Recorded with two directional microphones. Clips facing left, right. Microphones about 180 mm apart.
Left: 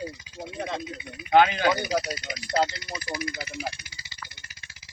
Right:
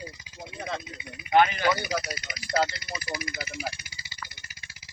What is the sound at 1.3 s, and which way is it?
Speech, 90° left.